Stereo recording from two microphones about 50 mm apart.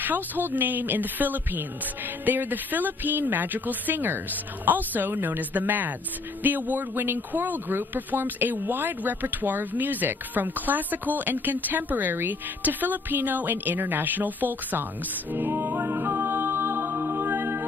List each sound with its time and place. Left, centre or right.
0.0 s speech: right
15.3 s a capella: right